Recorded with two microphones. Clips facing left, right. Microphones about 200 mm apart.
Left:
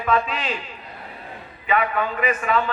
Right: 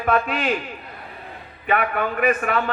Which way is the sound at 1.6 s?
55° right (ahead or behind).